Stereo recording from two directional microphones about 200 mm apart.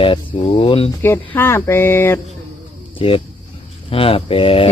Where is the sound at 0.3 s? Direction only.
30° left (ahead or behind).